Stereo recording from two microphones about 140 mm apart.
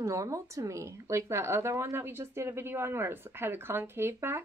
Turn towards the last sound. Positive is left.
turn(degrees=-15)  # may be behind; listen again after turning